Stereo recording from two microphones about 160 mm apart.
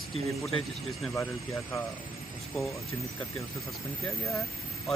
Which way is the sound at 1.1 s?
20° left (ahead or behind).